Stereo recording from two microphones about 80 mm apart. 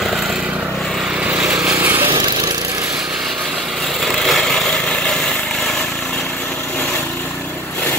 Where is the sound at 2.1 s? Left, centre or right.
Right.